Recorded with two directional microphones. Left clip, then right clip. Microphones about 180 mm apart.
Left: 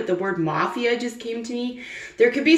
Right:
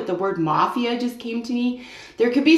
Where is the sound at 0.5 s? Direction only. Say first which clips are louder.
Right 2 dB; 35° right (ahead or behind).